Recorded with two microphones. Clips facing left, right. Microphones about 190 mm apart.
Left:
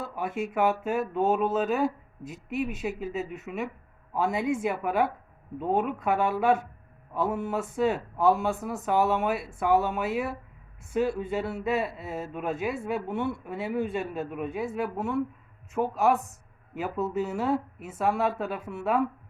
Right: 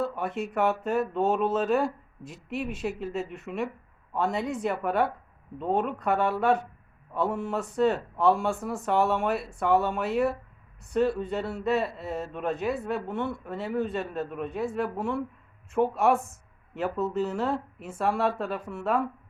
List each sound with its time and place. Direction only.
0.0 s speech: 5° left (ahead or behind)
16.1 s speech: 45° right (ahead or behind)
16.7 s speech: 5° left (ahead or behind)